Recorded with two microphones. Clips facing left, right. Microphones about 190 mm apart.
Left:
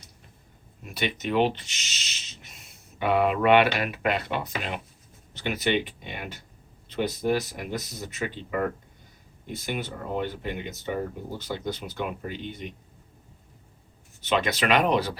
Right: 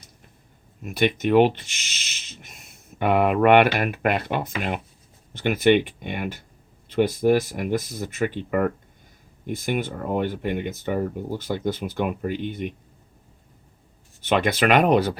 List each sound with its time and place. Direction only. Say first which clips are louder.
0.9 s speech: right 8 dB; 55° right (ahead or behind)
14.3 s speech: right 4 dB; 55° right (ahead or behind)